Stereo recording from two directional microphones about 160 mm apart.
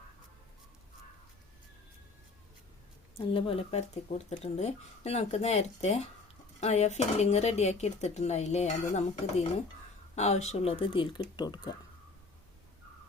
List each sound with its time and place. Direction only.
3.2 s speech: 35° left (ahead or behind)